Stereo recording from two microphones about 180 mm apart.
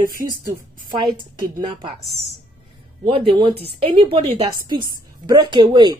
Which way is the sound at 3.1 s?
30° right (ahead or behind).